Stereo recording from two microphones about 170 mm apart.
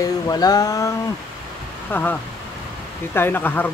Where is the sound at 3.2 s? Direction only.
10° left (ahead or behind).